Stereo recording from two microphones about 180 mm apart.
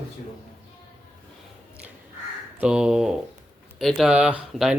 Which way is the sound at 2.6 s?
5° right (ahead or behind).